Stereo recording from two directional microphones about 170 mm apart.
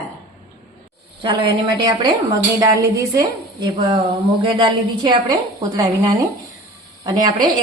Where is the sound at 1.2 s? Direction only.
30° right (ahead or behind).